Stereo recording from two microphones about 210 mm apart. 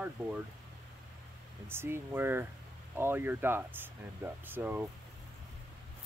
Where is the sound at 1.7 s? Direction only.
10° right (ahead or behind).